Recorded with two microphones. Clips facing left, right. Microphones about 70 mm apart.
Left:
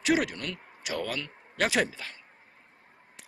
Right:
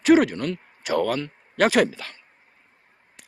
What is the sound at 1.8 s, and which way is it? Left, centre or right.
Speech, right.